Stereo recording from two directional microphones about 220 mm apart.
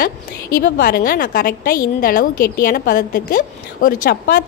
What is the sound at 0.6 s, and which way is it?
A woman's voice, 45° left (ahead or behind).